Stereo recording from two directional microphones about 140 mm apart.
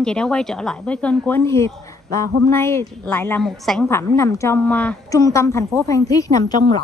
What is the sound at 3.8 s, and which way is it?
A woman's voice, 20° left (ahead or behind).